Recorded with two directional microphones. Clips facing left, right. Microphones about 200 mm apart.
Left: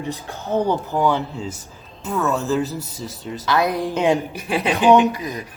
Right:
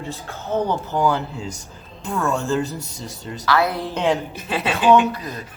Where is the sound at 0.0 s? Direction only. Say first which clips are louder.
Left 3 dB; 15° left (ahead or behind).